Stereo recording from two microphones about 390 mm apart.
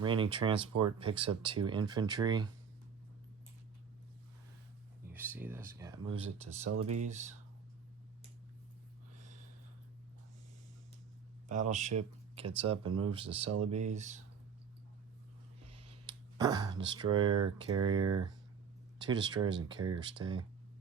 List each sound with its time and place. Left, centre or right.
0.0 s speech: centre
5.0 s speech: centre
6.7 s speech: right
7.0 s speech: centre
11.4 s speech: centre
16.0 s speech: centre